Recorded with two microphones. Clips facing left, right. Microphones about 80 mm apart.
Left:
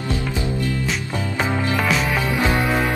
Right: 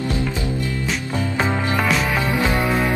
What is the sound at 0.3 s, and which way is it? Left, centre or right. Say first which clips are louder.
Music: even; left.